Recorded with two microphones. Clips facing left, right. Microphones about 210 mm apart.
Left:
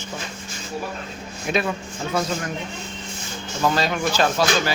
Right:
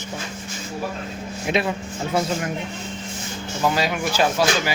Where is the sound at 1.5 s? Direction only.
20° right (ahead or behind).